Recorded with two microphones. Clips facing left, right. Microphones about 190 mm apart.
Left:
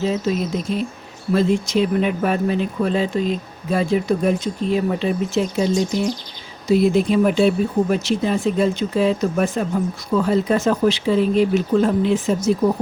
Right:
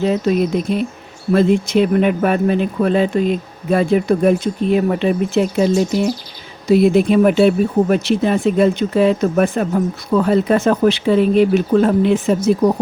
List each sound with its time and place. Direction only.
0.0 s speech: 65° right (ahead or behind)
5.9 s speech: 10° right (ahead or behind)
6.7 s speech: 60° right (ahead or behind)